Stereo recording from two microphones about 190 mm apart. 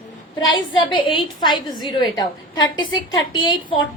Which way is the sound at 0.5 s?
25° left (ahead or behind).